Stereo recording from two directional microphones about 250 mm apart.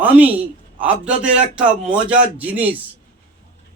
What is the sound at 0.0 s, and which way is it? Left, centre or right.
A man's voice, centre.